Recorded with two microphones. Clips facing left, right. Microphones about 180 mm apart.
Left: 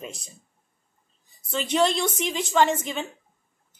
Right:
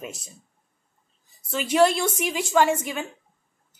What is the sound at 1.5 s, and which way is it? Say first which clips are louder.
A woman's voice: right 3 dB; 5° right (ahead or behind).